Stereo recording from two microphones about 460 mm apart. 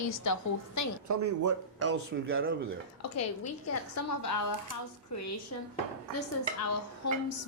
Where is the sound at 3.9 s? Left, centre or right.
Left.